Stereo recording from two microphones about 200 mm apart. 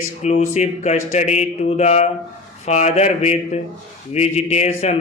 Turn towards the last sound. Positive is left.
turn(degrees=30)  # may be behind; listen again after turning